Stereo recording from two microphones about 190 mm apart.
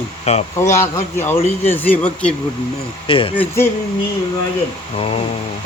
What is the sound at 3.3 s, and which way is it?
Speech, 10° left (ahead or behind).